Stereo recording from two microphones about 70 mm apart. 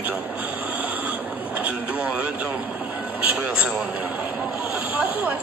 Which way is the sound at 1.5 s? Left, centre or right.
Right.